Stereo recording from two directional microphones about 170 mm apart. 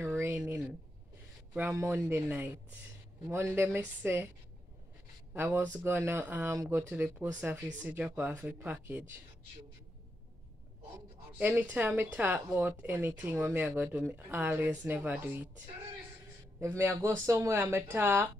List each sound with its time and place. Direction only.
0.0 s a sound: 15° right (ahead or behind)
1.5 s speech: 10° right (ahead or behind)
5.3 s speech: 10° right (ahead or behind)
11.3 s speech: 10° right (ahead or behind)
16.5 s speech: 10° right (ahead or behind)